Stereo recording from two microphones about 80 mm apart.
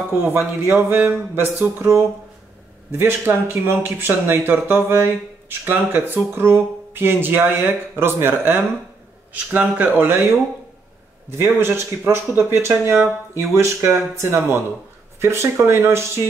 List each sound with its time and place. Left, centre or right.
0.1 s speech: right
9.3 s speech: centre
11.2 s speech: right